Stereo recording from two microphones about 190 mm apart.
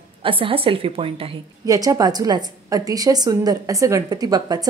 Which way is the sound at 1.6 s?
20° right (ahead or behind).